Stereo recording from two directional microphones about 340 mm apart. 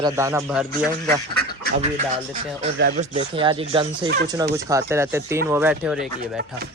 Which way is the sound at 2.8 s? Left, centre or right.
Right.